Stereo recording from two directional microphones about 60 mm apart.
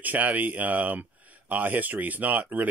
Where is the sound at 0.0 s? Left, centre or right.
Right.